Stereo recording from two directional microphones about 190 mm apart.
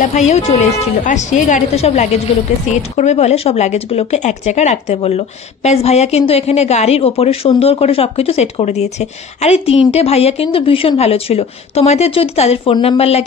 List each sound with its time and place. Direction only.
0.0 s speech: 40° left (ahead or behind)